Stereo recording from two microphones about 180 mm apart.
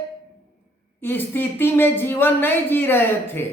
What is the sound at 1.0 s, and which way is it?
A woman's voice, 10° left (ahead or behind).